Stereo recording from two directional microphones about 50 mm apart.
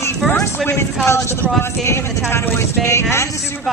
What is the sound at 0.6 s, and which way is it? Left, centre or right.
Speech, left.